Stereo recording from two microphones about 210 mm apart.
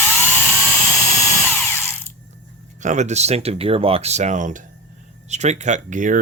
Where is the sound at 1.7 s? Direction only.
10° left (ahead or behind).